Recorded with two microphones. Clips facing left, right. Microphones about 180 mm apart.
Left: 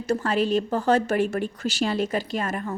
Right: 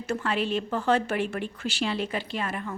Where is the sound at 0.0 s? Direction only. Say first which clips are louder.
Left 5 dB; 40° left (ahead or behind).